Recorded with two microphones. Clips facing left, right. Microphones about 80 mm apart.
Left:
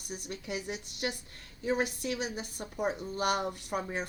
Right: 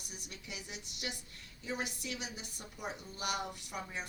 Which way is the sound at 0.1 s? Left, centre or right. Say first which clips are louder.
Left 11 dB; left.